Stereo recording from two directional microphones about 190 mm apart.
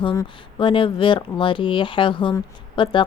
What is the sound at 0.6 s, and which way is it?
Speech, 25° left (ahead or behind).